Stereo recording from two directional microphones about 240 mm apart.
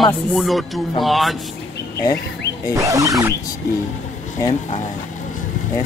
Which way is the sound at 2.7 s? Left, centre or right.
Centre.